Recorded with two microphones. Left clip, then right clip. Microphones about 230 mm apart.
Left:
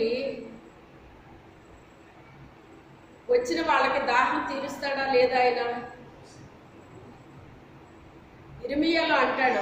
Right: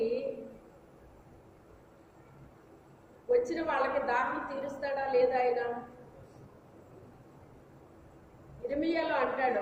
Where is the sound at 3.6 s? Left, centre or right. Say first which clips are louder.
Left 7 dB; left.